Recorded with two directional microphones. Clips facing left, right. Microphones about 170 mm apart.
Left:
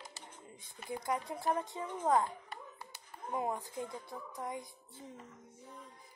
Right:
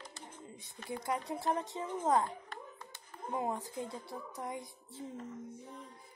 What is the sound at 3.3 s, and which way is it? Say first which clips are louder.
A woman's voice: even; 20° right (ahead or behind).